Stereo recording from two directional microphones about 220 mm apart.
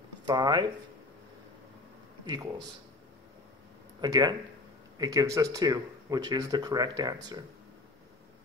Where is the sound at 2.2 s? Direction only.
20° right (ahead or behind).